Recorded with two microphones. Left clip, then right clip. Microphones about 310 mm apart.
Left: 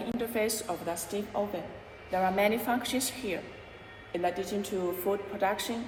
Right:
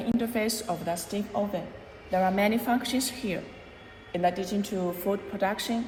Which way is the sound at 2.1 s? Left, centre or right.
Right.